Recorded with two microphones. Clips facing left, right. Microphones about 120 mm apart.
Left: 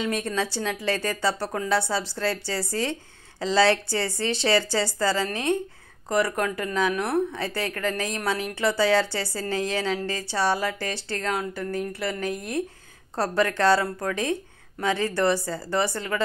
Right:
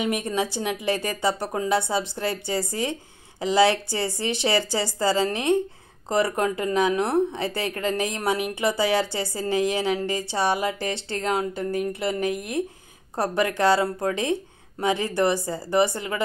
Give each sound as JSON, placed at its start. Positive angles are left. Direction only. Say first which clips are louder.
{"t": 0.0, "sound": "speech", "louder": "right 2 dB", "side_deg": -20}